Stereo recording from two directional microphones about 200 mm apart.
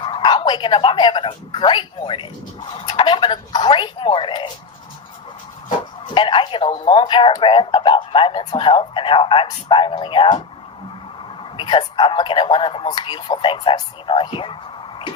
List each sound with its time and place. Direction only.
0.0 s speech: 25° left (ahead or behind)
6.1 s speech: 25° left (ahead or behind)
11.5 s speech: 25° left (ahead or behind)